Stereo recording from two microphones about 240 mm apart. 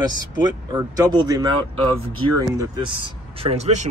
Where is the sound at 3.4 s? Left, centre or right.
Right.